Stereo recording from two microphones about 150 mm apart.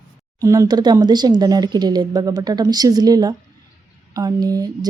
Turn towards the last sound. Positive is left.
turn(degrees=-25)  # may be behind; listen again after turning